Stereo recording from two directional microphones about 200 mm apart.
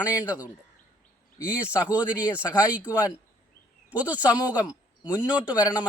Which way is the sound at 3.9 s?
5° right (ahead or behind).